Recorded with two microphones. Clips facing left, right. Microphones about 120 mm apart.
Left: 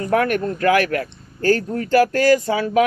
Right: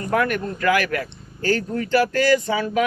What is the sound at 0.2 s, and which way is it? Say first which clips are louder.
Speech: left 3 dB; 45° left (ahead or behind).